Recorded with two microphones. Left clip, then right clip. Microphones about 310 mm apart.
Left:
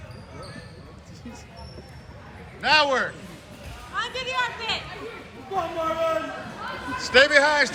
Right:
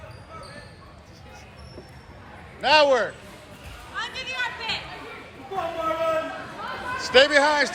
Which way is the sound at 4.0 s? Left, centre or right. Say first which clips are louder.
Left 3 dB; centre.